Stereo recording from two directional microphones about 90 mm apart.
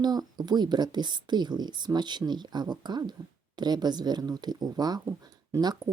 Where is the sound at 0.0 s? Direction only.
50° right (ahead or behind).